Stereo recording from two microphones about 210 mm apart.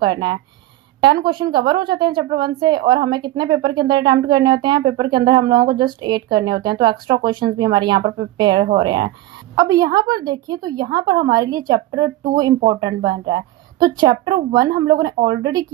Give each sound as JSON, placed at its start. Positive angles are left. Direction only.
{"t": 0.0, "sound": "a woman's voice", "side_deg": -20}